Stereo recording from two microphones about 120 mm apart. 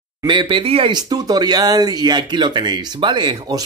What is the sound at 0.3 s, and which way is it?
Speech, 40° right (ahead or behind).